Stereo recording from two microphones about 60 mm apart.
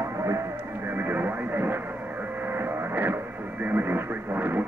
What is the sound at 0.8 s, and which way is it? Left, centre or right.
Radio, right.